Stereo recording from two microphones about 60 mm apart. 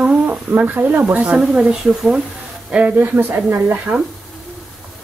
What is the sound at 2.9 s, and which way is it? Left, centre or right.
Speech, right.